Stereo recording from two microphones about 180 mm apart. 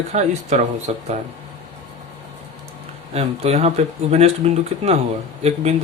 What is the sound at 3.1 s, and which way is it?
Speech, 35° right (ahead or behind).